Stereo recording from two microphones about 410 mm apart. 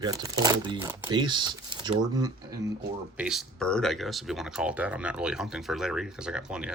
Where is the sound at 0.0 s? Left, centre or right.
Centre.